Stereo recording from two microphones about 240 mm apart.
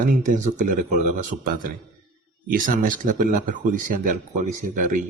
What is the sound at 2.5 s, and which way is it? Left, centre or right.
Speech, right.